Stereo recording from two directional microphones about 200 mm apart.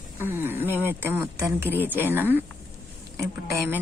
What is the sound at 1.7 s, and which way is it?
Speech, 10° right (ahead or behind).